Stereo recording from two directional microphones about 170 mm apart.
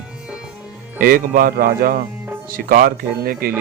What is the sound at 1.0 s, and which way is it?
A man's voice, 55° right (ahead or behind).